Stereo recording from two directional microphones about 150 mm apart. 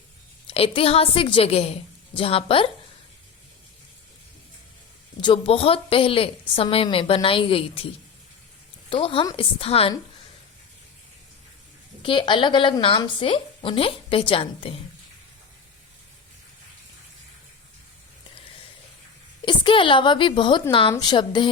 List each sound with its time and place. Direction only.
0.4 s a woman's voice: 40° left (ahead or behind)
5.2 s a woman's voice: 35° left (ahead or behind)
8.9 s a woman's voice: 35° left (ahead or behind)
12.0 s a woman's voice: 35° left (ahead or behind)
19.5 s a woman's voice: 35° left (ahead or behind)